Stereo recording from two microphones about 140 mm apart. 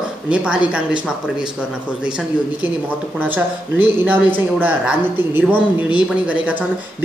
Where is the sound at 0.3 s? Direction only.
5° right (ahead or behind).